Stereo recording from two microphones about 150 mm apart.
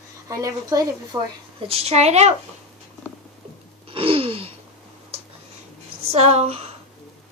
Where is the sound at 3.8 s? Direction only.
40° right (ahead or behind).